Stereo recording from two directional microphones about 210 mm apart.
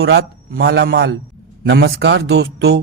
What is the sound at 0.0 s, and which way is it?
Speech, 50° right (ahead or behind).